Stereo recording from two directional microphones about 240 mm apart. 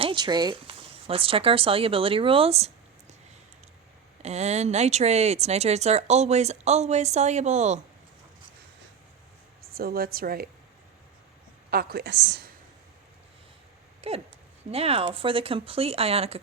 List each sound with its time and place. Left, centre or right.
0.0 s speech: centre
4.2 s speech: right
9.6 s speech: right
11.7 s a woman's voice: right
14.0 s speech: right